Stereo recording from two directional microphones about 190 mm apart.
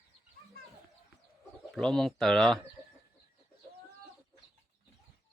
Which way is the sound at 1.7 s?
5° left (ahead or behind).